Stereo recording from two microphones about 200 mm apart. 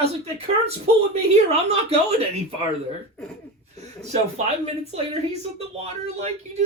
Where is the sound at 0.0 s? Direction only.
30° right (ahead or behind).